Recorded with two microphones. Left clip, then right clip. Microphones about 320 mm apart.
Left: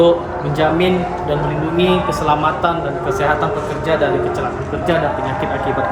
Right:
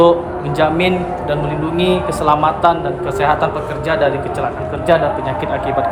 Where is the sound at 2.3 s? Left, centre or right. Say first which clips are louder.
Right 4 dB; right.